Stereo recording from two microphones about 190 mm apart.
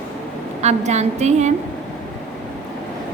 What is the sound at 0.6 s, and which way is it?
Speech, 35° right (ahead or behind).